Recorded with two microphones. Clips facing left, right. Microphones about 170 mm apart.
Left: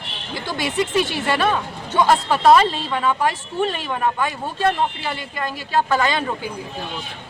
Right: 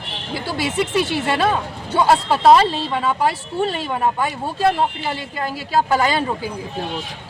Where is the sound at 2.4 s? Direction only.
25° right (ahead or behind).